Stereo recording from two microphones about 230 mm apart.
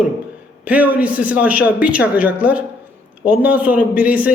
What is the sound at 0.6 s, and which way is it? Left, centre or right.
A man's voice, centre.